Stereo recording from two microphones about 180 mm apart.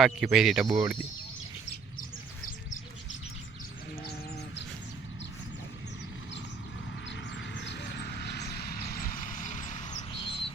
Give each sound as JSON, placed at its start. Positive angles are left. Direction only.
{"t": 0.0, "sound": "speech", "side_deg": -5}
{"t": 0.7, "sound": "speech", "side_deg": -15}
{"t": 7.1, "sound": "a sound", "side_deg": 80}
{"t": 10.1, "sound": "bird", "side_deg": 30}